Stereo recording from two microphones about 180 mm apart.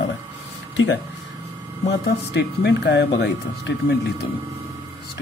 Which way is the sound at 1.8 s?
75° left (ahead or behind).